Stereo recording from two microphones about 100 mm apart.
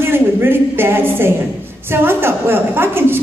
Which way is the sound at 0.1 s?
25° right (ahead or behind).